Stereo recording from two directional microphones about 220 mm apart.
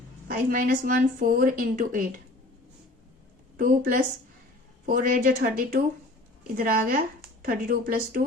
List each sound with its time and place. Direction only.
0.3 s a woman's voice: 40° right (ahead or behind)
3.6 s a woman's voice: 40° right (ahead or behind)